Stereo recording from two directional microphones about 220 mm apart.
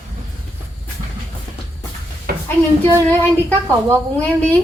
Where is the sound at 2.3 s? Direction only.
45° right (ahead or behind).